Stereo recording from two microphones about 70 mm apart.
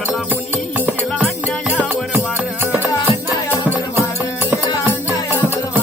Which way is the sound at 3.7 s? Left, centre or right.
Right.